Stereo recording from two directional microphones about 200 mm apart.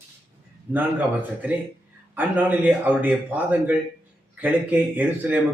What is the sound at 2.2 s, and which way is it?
A man's voice, 10° right (ahead or behind).